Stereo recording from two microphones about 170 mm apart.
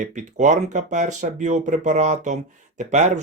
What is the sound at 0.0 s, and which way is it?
Speech, 45° right (ahead or behind).